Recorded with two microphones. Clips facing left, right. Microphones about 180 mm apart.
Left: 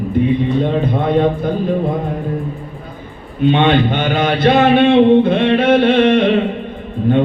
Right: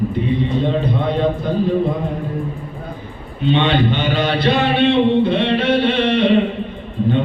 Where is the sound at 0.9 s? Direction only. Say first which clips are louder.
Left 4 dB; 50° left (ahead or behind).